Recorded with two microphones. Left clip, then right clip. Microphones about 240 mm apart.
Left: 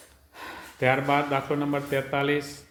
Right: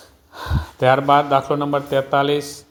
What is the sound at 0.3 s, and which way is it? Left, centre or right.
Speech, right.